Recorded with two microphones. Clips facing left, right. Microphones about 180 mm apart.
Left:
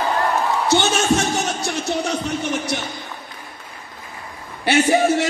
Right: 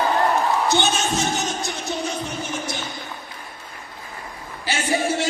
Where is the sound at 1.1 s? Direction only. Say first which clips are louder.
Left 4 dB; 75° left (ahead or behind).